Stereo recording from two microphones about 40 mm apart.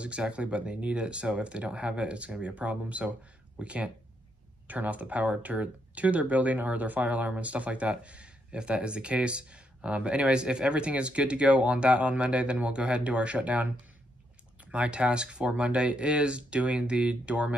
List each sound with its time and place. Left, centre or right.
0.0 s speech: right